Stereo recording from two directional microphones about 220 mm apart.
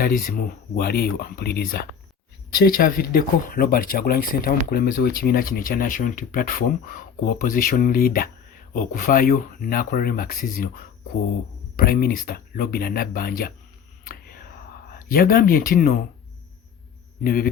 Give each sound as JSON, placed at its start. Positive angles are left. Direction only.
{"t": 0.0, "sound": "speech", "side_deg": 40}
{"t": 11.8, "sound": "speech", "side_deg": 45}
{"t": 14.0, "sound": "a sound", "side_deg": 40}
{"t": 14.9, "sound": "speech", "side_deg": 40}
{"t": 17.2, "sound": "speech", "side_deg": 40}